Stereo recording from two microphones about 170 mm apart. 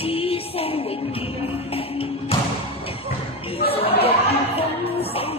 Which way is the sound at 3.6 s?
35° left (ahead or behind).